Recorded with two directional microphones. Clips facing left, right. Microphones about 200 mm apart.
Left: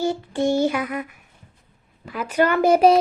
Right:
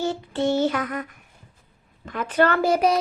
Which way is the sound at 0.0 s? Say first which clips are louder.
Left 2 dB; 10° left (ahead or behind).